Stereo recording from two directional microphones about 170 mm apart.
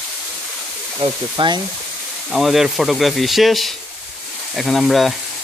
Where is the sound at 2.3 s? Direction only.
Centre (ahead or behind).